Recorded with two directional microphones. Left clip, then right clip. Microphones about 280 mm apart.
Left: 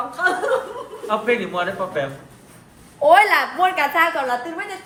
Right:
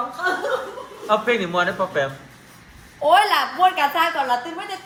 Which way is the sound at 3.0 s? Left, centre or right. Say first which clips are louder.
Left 3 dB; centre.